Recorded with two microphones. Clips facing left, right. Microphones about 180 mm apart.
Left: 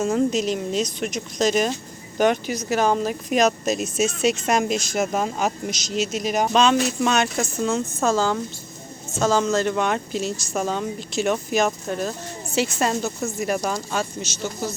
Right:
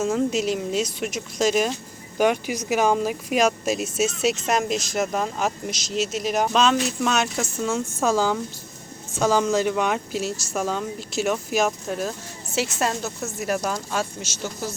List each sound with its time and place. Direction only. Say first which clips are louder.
0.0 s a woman's voice: left 1 dB; 5° right (ahead or behind)